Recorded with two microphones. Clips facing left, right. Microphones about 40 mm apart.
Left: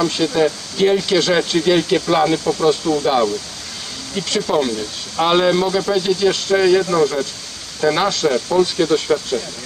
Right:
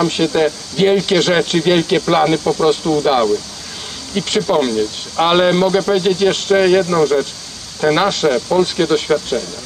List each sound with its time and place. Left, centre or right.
0.0 s speech: right
4.5 s speech: right
7.8 s speech: right
8.3 s speech: centre